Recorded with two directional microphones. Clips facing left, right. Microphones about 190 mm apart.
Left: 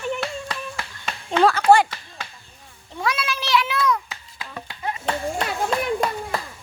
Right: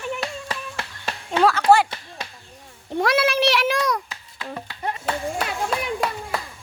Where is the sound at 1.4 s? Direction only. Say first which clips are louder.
Left 1 dB; 5° right (ahead or behind).